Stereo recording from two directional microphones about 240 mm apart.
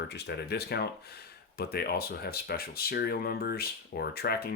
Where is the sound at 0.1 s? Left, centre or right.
Left.